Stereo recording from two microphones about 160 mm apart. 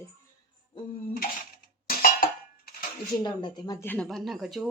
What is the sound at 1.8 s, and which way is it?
Dishes, 65° left (ahead or behind).